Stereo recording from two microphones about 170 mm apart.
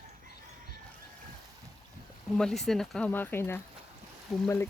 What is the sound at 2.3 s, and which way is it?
Speech, centre (ahead or behind).